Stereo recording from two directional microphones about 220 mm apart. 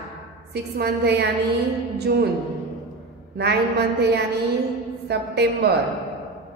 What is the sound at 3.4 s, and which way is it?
A woman's voice, 50° right (ahead or behind).